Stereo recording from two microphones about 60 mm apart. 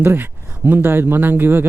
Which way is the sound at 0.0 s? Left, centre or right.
Right.